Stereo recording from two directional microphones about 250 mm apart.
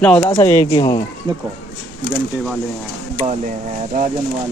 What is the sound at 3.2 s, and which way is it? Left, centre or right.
Speech, centre.